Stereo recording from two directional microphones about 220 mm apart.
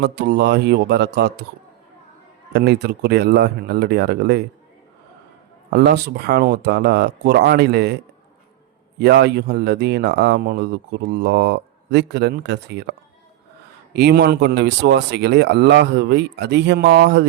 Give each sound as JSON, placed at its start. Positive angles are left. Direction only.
{"t": 0.0, "sound": "speech", "side_deg": -50}
{"t": 2.5, "sound": "speech", "side_deg": -50}
{"t": 5.7, "sound": "speech", "side_deg": -45}
{"t": 9.0, "sound": "speech", "side_deg": -50}